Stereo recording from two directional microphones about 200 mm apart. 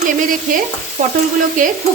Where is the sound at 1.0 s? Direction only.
45° right (ahead or behind).